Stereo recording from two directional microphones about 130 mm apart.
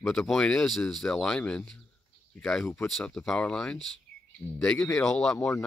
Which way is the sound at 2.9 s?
Centre (ahead or behind).